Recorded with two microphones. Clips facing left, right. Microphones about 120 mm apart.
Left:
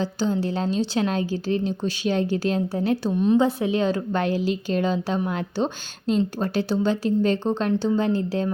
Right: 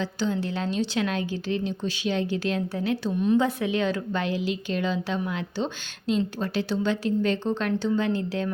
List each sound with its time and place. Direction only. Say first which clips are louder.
0.0 s a woman's voice: left 3 dB; 35° left (ahead or behind)
3.2 s a woman's voice: left 3 dB; 30° left (ahead or behind)